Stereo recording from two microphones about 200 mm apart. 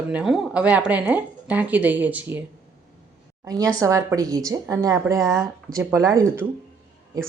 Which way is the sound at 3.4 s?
20° right (ahead or behind).